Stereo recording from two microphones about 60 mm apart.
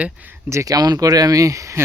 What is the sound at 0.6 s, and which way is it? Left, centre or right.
Speech, right.